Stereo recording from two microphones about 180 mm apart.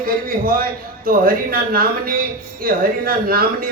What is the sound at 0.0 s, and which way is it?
A man's voice, 55° right (ahead or behind).